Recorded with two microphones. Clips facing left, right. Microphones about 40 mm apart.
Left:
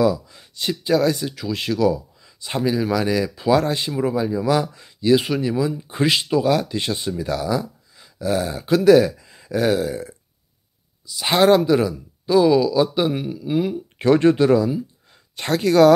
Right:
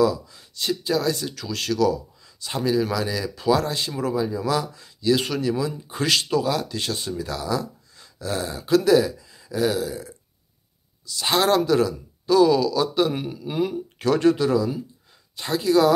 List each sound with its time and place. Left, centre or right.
0.0 s speech: left
1.2 s speech: centre
5.1 s speech: centre
6.4 s speech: left
11.1 s speech: left
13.1 s speech: centre
13.9 s speech: left
15.3 s speech: left